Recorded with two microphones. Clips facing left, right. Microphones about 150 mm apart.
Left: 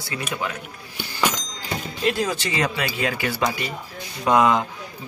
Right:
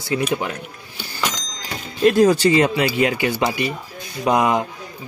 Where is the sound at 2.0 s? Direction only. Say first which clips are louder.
Right 11 dB; 40° right (ahead or behind).